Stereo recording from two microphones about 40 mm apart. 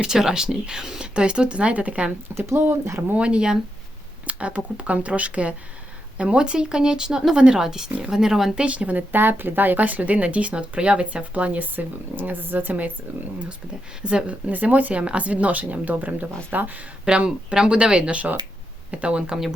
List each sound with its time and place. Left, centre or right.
0.0 s speech: centre; by 2.1 s right
2.5 s speech: right
3.2 s speech: right
4.3 s speech: right; by 8.6 s centre
8.6 s speech: right
12.1 s speech: right
14.0 s speech: right
14.5 s speech: right
17.1 s speech: right